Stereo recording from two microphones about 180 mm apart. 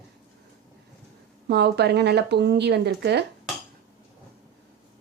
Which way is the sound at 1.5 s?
65° right (ahead or behind).